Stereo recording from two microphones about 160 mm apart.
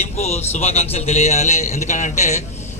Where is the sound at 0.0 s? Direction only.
45° left (ahead or behind).